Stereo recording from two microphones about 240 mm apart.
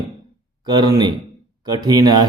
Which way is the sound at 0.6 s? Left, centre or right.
Centre.